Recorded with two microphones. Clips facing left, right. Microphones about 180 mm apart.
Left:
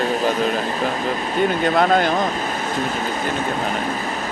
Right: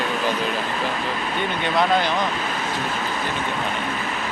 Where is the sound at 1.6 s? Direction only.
45° left (ahead or behind).